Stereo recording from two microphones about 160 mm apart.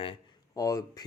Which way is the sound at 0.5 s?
20° left (ahead or behind).